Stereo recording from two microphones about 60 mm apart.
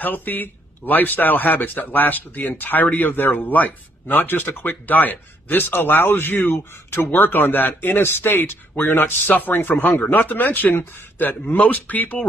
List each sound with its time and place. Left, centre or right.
0.0 s a man's voice: left